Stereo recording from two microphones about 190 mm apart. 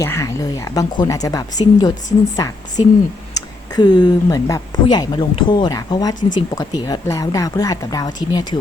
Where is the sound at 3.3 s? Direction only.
20° left (ahead or behind).